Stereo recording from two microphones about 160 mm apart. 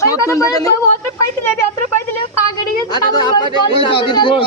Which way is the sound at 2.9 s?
25° left (ahead or behind).